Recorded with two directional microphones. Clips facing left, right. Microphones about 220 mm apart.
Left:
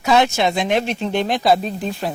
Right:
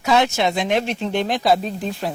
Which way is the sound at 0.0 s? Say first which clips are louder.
Left 2 dB; 10° left (ahead or behind).